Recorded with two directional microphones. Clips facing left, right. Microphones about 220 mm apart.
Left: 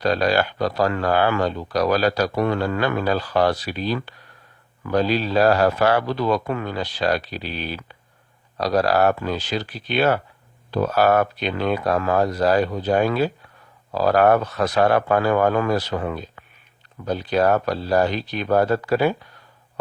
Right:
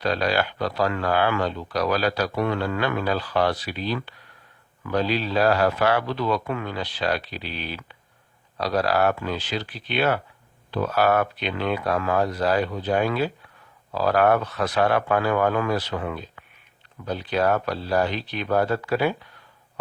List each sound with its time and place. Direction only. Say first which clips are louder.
0.0 s speech: left 4 dB; 40° left (ahead or behind)